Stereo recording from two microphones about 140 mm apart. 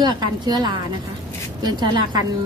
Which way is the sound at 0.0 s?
30° right (ahead or behind).